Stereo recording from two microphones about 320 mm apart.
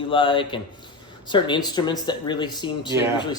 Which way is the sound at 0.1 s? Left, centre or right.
Centre.